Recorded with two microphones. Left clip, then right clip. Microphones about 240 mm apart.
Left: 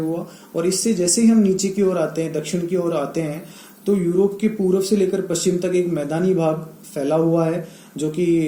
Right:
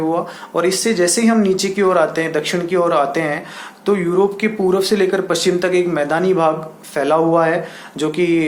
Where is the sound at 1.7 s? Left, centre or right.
Right.